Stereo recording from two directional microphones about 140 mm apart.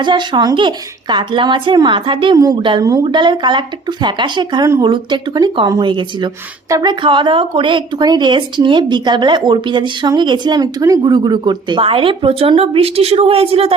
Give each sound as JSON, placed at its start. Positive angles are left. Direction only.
{"t": 0.0, "sound": "speech", "side_deg": -35}
{"t": 7.0, "sound": "speech", "side_deg": -35}